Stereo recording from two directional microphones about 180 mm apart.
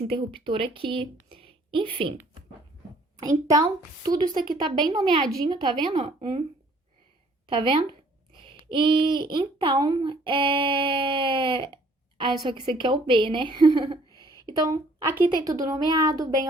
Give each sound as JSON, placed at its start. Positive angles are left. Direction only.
{"t": 0.1, "sound": "speech", "side_deg": -30}
{"t": 3.2, "sound": "speech", "side_deg": -20}
{"t": 7.4, "sound": "speech", "side_deg": -30}